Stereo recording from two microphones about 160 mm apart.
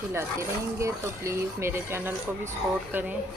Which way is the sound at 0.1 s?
15° right (ahead or behind).